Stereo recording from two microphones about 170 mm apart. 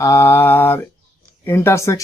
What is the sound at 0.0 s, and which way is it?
Mantra, 15° left (ahead or behind).